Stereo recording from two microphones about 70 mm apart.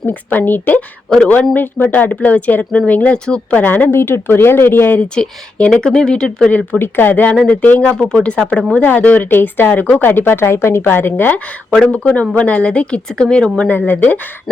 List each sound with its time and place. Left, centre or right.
0.1 s a woman's voice: left
3.6 s speech: left
4.9 s a woman's voice: centre
6.5 s speech: centre
6.7 s speech: left
7.9 s a woman's voice: centre
13.7 s speech: left